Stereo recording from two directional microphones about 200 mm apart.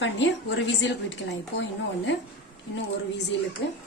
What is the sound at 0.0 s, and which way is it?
A woman's voice, 65° left (ahead or behind).